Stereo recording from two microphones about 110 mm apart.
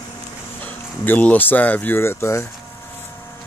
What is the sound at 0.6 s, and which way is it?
Speech, 15° left (ahead or behind).